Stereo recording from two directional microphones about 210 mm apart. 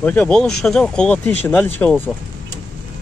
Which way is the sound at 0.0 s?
5° left (ahead or behind).